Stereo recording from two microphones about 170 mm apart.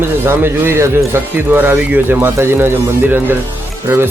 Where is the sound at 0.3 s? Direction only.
15° right (ahead or behind).